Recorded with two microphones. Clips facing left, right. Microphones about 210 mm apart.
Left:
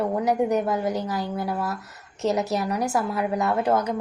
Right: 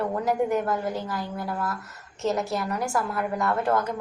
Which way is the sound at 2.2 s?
20° left (ahead or behind).